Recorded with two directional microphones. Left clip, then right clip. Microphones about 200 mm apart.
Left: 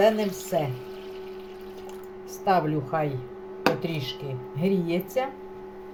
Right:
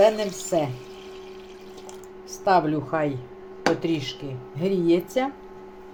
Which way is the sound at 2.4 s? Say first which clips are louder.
Right 3 dB; 40° right (ahead or behind).